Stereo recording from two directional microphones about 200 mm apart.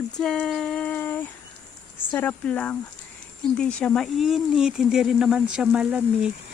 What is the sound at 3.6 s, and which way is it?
Speech, 5° left (ahead or behind).